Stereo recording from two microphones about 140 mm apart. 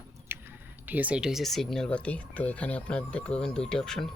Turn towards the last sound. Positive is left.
turn(degrees=5)  # may be behind; listen again after turning